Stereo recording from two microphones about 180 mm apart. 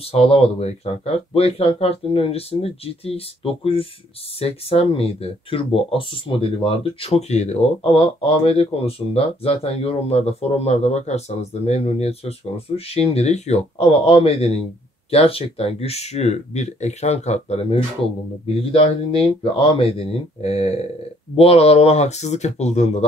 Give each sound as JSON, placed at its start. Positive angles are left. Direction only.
{"t": 0.1, "sound": "speech", "side_deg": 35}